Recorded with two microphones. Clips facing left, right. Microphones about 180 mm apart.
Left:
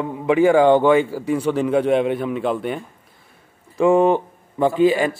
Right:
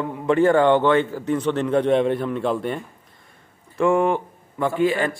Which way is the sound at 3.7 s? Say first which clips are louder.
Left 4 dB; 20° left (ahead or behind).